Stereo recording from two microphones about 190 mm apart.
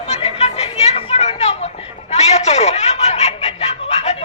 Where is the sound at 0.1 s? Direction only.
30° left (ahead or behind).